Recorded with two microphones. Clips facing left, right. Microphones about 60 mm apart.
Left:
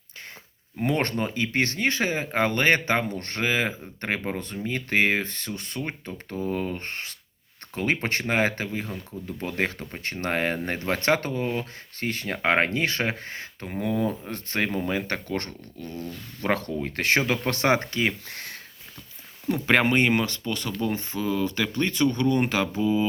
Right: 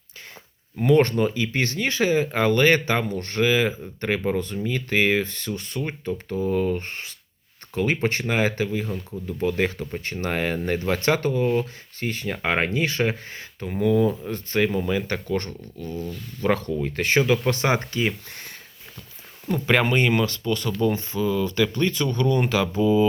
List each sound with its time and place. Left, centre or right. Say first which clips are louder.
0.9 s speech: right 7 dB; left
13.7 s speech: right 6 dB; left
17.2 s speech: right 4 dB; left
19.5 s speech: right 1 dB; left